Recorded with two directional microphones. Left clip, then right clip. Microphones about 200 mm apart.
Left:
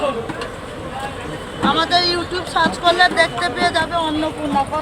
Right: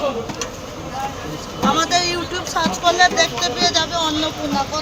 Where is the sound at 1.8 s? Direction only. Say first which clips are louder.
Left 3 dB; 50° right (ahead or behind).